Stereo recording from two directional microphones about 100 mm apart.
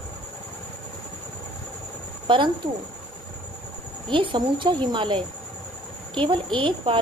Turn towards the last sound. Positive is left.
turn(degrees=-60)  # may be behind; listen again after turning